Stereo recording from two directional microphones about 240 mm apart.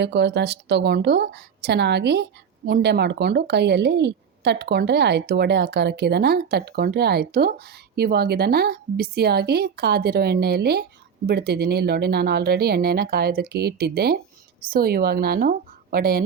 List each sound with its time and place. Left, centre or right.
0.0 s a woman's voice: right